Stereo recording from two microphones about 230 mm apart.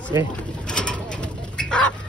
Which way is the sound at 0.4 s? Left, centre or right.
Centre.